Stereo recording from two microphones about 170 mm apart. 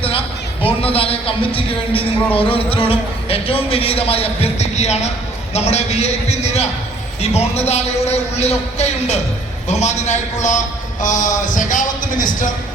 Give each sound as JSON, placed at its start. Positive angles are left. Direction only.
{"t": 0.6, "sound": "speech", "side_deg": 35}